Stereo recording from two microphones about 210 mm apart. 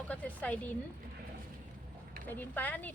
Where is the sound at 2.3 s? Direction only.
10° left (ahead or behind).